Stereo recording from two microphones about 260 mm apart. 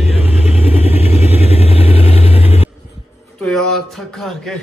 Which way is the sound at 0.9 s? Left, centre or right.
Left.